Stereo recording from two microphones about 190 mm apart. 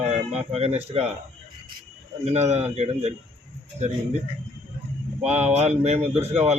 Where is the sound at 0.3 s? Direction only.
35° right (ahead or behind).